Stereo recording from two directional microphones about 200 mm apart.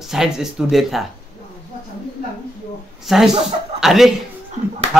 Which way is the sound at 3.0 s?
Centre (ahead or behind).